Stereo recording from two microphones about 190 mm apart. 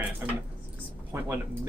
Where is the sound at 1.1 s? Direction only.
15° right (ahead or behind).